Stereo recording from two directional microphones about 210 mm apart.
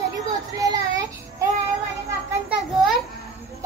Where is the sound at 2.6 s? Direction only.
Centre (ahead or behind).